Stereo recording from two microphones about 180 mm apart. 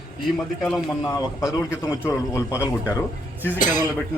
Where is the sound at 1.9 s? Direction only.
10° right (ahead or behind).